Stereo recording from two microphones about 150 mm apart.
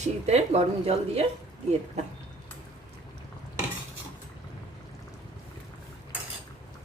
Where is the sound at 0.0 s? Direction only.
45° right (ahead or behind).